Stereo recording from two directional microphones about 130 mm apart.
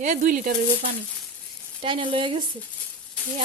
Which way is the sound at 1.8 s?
40° right (ahead or behind).